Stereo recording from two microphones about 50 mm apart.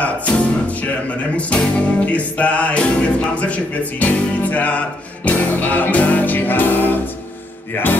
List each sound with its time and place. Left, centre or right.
0.0 s music: left
1.3 s speech: left
1.8 s music: left